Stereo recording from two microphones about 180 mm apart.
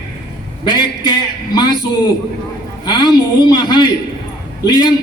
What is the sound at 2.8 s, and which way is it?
A man's voice, 20° left (ahead or behind).